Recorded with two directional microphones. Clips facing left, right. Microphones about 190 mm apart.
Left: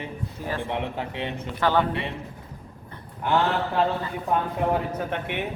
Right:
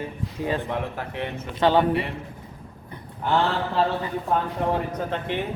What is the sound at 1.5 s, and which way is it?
Speech, 20° right (ahead or behind).